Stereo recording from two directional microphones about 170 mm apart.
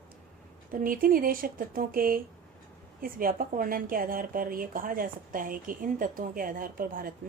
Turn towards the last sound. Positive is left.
turn(degrees=-55)  # may be behind; listen again after turning